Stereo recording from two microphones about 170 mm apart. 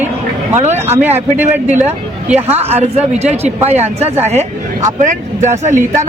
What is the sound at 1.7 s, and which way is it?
Speech, 40° right (ahead or behind).